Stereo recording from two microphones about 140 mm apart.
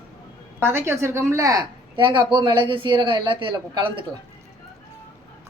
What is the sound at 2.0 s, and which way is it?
Speech, 35° right (ahead or behind).